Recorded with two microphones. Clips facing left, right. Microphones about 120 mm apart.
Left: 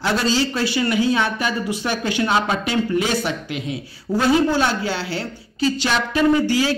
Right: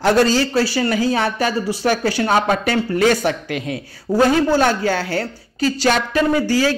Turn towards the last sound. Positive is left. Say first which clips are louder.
# right 1 dB
turn(degrees=-40)  # may be behind; listen again after turning